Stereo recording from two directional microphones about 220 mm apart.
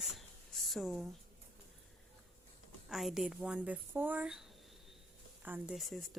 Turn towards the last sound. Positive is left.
turn(degrees=0)  # may be behind; listen again after turning